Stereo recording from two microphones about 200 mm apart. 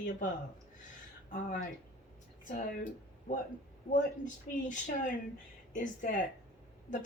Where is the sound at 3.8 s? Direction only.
40° left (ahead or behind).